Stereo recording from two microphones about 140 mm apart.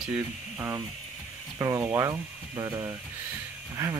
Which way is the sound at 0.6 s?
15° right (ahead or behind).